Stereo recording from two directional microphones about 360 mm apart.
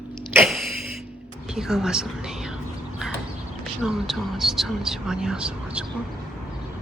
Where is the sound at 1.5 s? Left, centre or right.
Centre.